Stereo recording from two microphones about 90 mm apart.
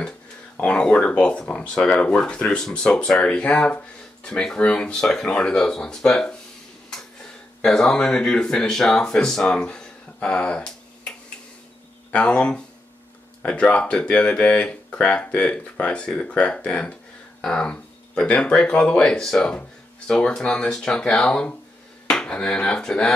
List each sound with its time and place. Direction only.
0.6 s speech: 10° left (ahead or behind)
7.6 s speech: 5° left (ahead or behind)